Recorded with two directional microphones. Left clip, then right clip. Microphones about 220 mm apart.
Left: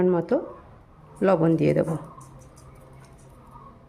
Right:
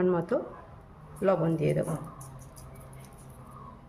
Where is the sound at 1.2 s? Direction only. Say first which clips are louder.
Left 6 dB; 40° left (ahead or behind).